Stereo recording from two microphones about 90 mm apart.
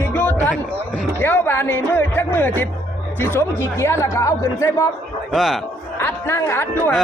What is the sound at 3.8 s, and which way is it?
Speech, 30° left (ahead or behind).